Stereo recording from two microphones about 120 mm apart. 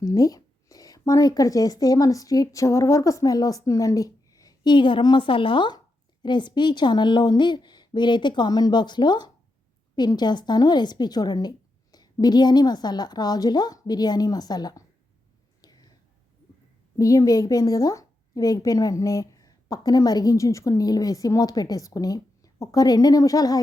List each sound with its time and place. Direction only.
0.0 s speech: 30° left (ahead or behind)
15.6 s whispering: 35° left (ahead or behind)
17.0 s a woman's voice: 30° left (ahead or behind)